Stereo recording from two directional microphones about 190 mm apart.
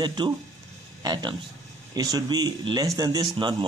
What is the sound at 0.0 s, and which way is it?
Speech, 25° right (ahead or behind).